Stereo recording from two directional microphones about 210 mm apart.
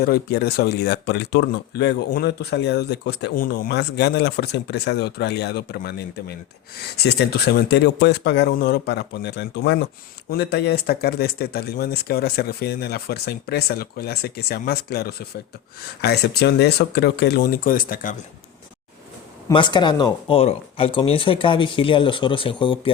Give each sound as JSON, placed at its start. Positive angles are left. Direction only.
{"t": 0.0, "sound": "speech", "side_deg": 50}
{"t": 19.5, "sound": "speech", "side_deg": 20}